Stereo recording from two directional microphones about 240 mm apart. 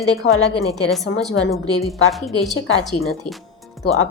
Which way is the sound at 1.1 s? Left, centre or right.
Left.